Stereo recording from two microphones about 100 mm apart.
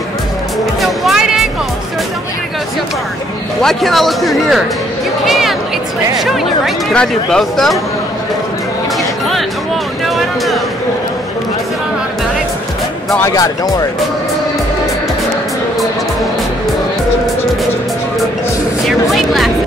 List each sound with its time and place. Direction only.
0.7 s music: centre (ahead or behind)
3.6 s a man's voice: centre (ahead or behind)
5.2 s music: centre (ahead or behind)
6.1 s a man's voice: centre (ahead or behind)
10.0 s a sound: centre (ahead or behind)
13.2 s speech: 35° left (ahead or behind)
18.9 s music: centre (ahead or behind)